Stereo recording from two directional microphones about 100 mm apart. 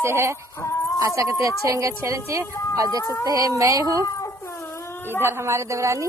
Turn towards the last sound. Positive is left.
turn(degrees=-30)  # may be behind; listen again after turning